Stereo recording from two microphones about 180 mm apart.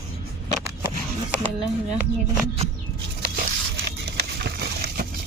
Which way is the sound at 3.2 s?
55° right (ahead or behind).